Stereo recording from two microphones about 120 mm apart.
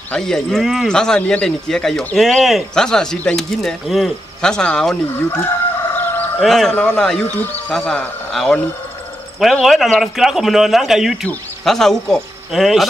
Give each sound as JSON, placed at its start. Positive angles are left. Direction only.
{"t": 0.1, "sound": "speech", "side_deg": 5}
{"t": 5.9, "sound": "fowl", "side_deg": 15}
{"t": 6.4, "sound": "speech", "side_deg": 0}